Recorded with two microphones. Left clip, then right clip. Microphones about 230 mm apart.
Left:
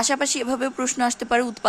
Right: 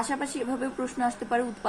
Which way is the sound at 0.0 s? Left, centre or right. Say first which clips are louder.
Left 7 dB; left.